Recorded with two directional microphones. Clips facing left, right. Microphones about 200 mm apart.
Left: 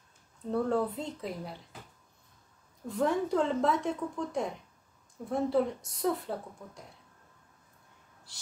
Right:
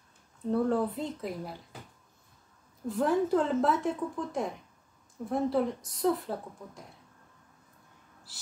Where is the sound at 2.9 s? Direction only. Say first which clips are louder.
Right 2 dB; centre (ahead or behind).